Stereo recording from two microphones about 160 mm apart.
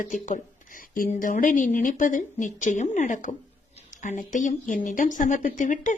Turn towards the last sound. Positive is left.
turn(degrees=50)  # may be behind; listen again after turning